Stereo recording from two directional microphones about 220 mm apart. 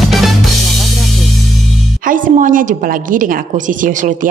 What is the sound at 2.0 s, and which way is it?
A woman's voice, 35° right (ahead or behind).